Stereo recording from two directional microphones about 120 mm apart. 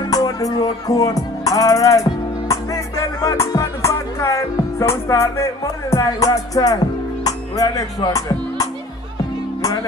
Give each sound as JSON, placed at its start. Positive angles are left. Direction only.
{"t": 0.1, "sound": "speech", "side_deg": 30}
{"t": 2.4, "sound": "music", "side_deg": 25}
{"t": 7.2, "sound": "speech", "side_deg": 30}